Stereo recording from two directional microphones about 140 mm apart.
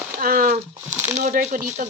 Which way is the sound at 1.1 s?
65° right (ahead or behind).